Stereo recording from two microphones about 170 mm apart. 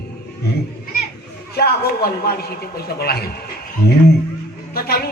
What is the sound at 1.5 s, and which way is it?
A man's voice, 65° left (ahead or behind).